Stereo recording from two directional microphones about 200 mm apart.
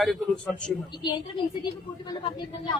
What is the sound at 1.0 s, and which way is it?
Speech, 20° left (ahead or behind).